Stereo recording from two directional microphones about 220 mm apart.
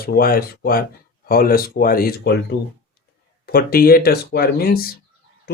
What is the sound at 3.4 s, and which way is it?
Speech, 45° left (ahead or behind).